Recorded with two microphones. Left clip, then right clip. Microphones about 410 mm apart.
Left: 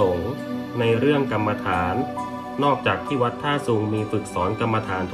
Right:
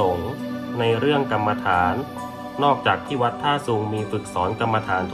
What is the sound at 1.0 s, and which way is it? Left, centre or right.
Speech, centre.